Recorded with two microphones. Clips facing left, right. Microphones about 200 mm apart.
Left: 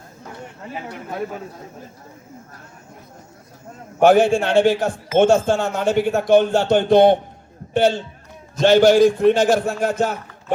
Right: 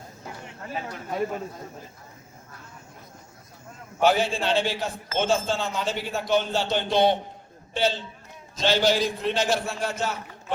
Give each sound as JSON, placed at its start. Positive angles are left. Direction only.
{"t": 0.7, "sound": "speech", "side_deg": 15}
{"t": 4.0, "sound": "speech", "side_deg": 50}